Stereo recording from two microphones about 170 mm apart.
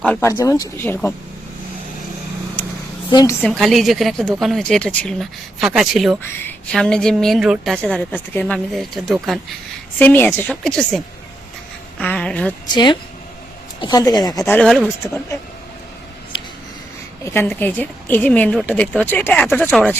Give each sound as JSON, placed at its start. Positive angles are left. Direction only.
{"t": 0.2, "sound": "a woman's voice", "side_deg": 20}
{"t": 3.1, "sound": "speech", "side_deg": 25}
{"t": 3.4, "sound": "a woman's voice", "side_deg": 0}
{"t": 10.0, "sound": "a woman's voice", "side_deg": 10}
{"t": 12.7, "sound": "a woman's voice", "side_deg": 25}
{"t": 17.2, "sound": "a woman's voice", "side_deg": 15}